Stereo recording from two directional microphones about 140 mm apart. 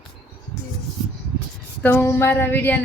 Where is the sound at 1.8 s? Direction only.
15° left (ahead or behind).